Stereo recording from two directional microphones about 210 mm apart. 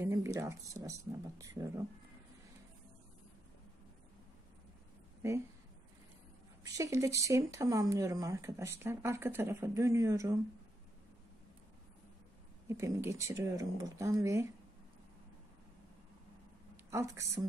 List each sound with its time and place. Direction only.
0.0 s speech: 15° right (ahead or behind)
6.6 s speech: 15° right (ahead or behind)
12.6 s speech: 15° right (ahead or behind)
16.9 s speech: 15° right (ahead or behind)